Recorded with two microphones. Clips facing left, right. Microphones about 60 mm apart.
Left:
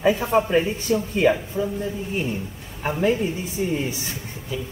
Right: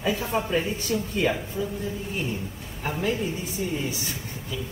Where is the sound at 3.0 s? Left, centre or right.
Left.